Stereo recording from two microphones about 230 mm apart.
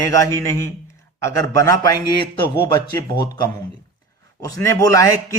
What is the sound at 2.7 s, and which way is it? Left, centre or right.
Speech, centre.